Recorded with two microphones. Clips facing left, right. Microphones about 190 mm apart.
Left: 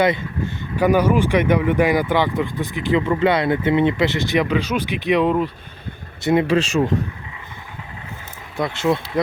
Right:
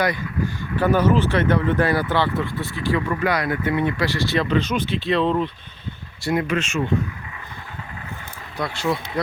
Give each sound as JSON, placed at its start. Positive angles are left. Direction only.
{"t": 0.0, "sound": "speech", "side_deg": 25}
{"t": 0.8, "sound": "speech", "side_deg": 10}
{"t": 6.2, "sound": "speech", "side_deg": 30}
{"t": 8.5, "sound": "speech", "side_deg": 20}